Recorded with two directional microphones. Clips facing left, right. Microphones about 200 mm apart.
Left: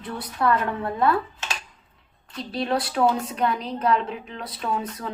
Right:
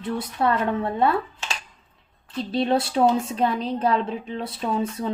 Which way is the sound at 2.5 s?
25° right (ahead or behind).